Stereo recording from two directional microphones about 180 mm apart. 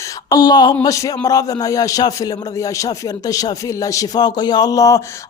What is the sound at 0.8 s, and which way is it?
A man's voice, 20° left (ahead or behind).